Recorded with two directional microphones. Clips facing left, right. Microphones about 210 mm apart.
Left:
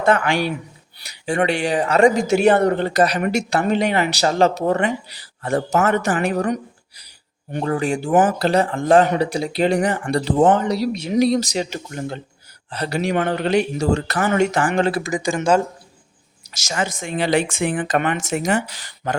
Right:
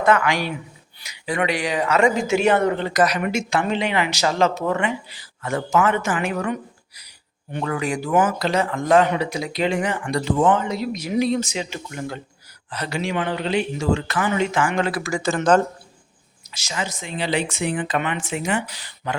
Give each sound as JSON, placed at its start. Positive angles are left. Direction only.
{"t": 0.0, "sound": "speech", "side_deg": 30}
{"t": 16.5, "sound": "speech", "side_deg": 45}